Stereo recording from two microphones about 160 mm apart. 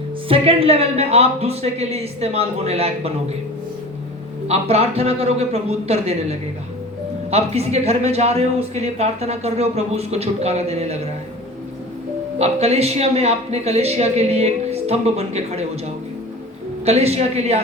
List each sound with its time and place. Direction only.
0.3 s a man's voice: 35° right (ahead or behind)
4.4 s a man's voice: 40° right (ahead or behind)
12.4 s a man's voice: 40° right (ahead or behind)
16.8 s a man's voice: 40° right (ahead or behind)